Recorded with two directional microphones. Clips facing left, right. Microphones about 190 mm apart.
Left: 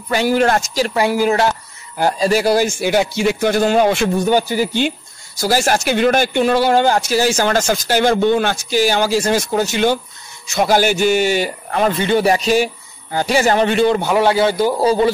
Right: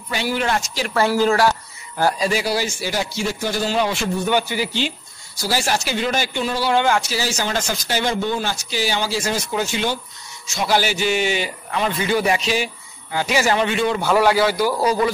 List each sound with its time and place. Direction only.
0.1 s speech: 45° left (ahead or behind)
0.9 s speech: 15° left (ahead or behind)
2.2 s a man's voice: 45° left (ahead or behind)
4.3 s speech: 40° left (ahead or behind); by 6.7 s 60° left (ahead or behind)
6.7 s speech: 40° left (ahead or behind)
7.1 s speech: 50° left (ahead or behind)
9.7 s a man's voice: 60° left (ahead or behind)
12.0 s a man's voice: 30° left (ahead or behind)
12.4 s speech: 45° left (ahead or behind)
14.0 s a man's voice: 20° left (ahead or behind)